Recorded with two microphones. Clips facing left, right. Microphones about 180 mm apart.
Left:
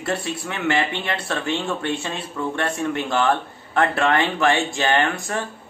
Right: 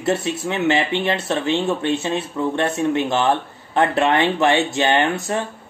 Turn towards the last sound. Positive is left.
turn(degrees=-20)  # may be behind; listen again after turning